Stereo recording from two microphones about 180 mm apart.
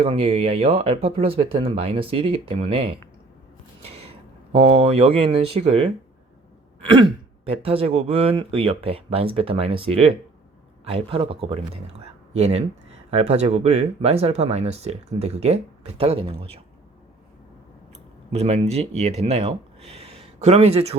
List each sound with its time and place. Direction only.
0.0 s speech: 30° right (ahead or behind)
3.8 s a sound: 35° right (ahead or behind)
4.5 s speech: 35° right (ahead or behind)
7.4 s speech: 30° right (ahead or behind)
18.3 s speech: 35° right (ahead or behind)